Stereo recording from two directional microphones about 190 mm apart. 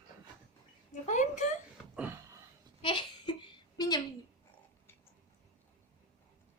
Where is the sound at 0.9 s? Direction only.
40° left (ahead or behind).